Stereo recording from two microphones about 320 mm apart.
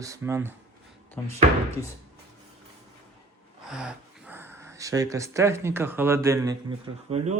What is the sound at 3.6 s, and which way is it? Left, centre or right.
Speech, centre.